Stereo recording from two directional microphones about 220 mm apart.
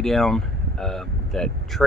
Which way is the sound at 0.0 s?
Centre (ahead or behind).